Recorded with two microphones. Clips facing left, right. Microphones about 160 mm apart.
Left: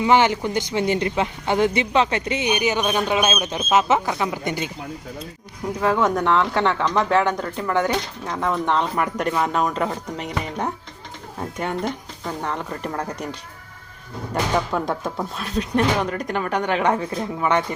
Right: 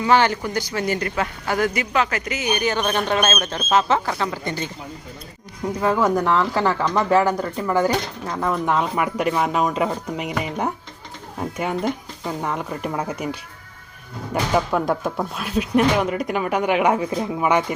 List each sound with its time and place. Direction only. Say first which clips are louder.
0.0 s speech: left 1 dB; 15° left (ahead or behind)
2.5 s speech: right 1 dB; 15° left (ahead or behind)
5.8 s speech: even; centre (ahead or behind)
14.5 s speech: right 4 dB; 5° right (ahead or behind)